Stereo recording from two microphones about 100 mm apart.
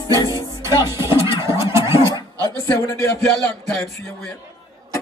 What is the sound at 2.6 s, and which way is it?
Speech, 30° left (ahead or behind).